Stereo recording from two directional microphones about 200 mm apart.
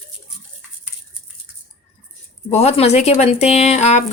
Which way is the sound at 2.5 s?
30° left (ahead or behind).